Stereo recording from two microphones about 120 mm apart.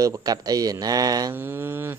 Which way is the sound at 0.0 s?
30° right (ahead or behind).